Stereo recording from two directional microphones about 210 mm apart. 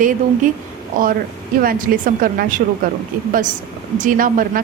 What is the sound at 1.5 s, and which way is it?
A woman's voice, 40° right (ahead or behind).